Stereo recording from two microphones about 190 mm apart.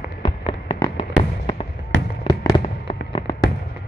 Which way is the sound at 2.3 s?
20° left (ahead or behind).